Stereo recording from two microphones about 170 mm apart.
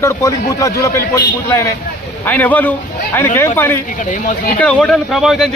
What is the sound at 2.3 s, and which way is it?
A man's voice, 10° left (ahead or behind).